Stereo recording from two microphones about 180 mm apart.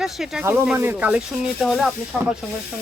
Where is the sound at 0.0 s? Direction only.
Centre (ahead or behind).